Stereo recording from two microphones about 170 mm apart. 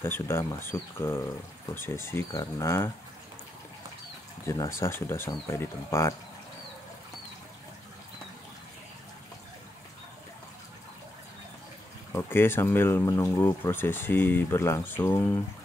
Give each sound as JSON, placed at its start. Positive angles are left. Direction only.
{"t": 0.0, "sound": "speech", "side_deg": 15}
{"t": 4.5, "sound": "speech", "side_deg": 15}
{"t": 12.1, "sound": "speech", "side_deg": 15}